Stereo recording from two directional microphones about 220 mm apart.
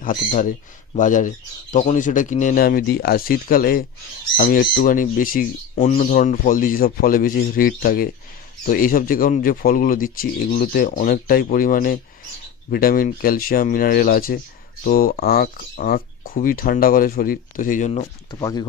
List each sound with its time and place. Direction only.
0.0 s speech: 35° left (ahead or behind)
18.3 s speech: 20° left (ahead or behind)